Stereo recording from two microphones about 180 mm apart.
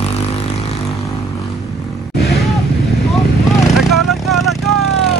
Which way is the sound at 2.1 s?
65° left (ahead or behind).